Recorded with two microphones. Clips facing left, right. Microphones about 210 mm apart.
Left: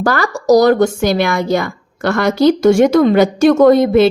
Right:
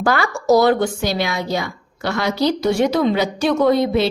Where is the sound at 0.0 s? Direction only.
40° left (ahead or behind).